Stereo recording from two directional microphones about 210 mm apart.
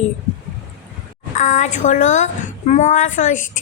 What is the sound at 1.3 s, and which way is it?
A woman's voice, 35° left (ahead or behind).